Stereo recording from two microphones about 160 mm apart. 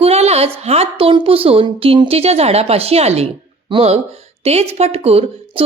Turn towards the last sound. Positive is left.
turn(degrees=-35)  # may be behind; listen again after turning